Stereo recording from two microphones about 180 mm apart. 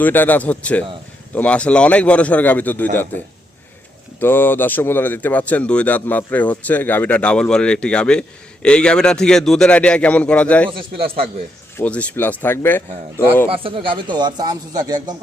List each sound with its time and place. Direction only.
0.0 s speech: 10° left (ahead or behind)
4.2 s a man's voice: 10° left (ahead or behind)
10.7 s a man's voice: 30° right (ahead or behind)
11.8 s speech: 5° left (ahead or behind)
13.5 s a man's voice: 30° right (ahead or behind)